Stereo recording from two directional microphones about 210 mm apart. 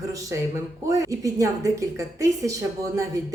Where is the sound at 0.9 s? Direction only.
15° right (ahead or behind).